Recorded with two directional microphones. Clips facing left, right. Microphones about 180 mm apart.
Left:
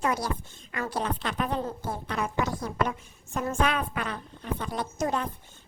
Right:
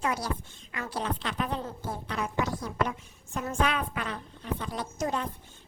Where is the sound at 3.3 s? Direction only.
50° left (ahead or behind).